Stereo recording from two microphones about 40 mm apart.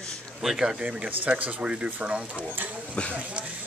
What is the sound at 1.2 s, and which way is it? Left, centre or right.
Speech, right.